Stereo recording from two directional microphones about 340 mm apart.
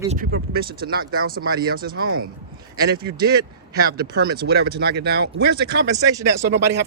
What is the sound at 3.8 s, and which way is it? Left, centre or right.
Speech, right.